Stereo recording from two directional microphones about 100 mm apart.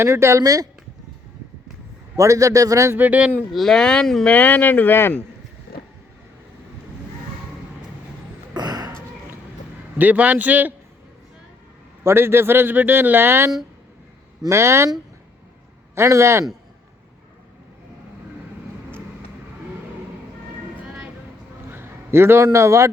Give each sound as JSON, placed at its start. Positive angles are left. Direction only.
{"t": 0.0, "sound": "speech", "side_deg": -30}
{"t": 2.1, "sound": "a man's voice", "side_deg": -30}
{"t": 3.0, "sound": "a man's voice", "side_deg": -15}
{"t": 3.5, "sound": "speech", "side_deg": 5}
{"t": 4.4, "sound": "speech", "side_deg": 20}
{"t": 8.5, "sound": "a sound", "side_deg": -45}
{"t": 10.0, "sound": "a man's voice", "side_deg": -15}
{"t": 12.0, "sound": "speech", "side_deg": -25}
{"t": 16.0, "sound": "speech", "side_deg": -30}
{"t": 21.7, "sound": "a sound", "side_deg": -25}
{"t": 22.5, "sound": "a man's voice", "side_deg": -30}